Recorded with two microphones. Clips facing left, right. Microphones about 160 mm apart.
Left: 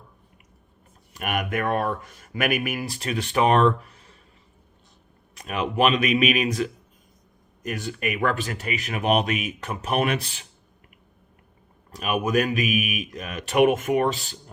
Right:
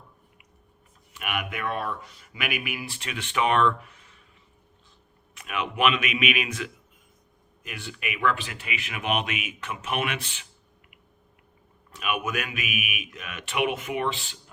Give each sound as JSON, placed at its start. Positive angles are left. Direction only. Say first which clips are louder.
{"t": 1.1, "sound": "speech", "louder": "left 6 dB", "side_deg": 45}
{"t": 5.3, "sound": "speech", "louder": "left 4 dB", "side_deg": 35}
{"t": 11.9, "sound": "speech", "louder": "left 5 dB", "side_deg": 35}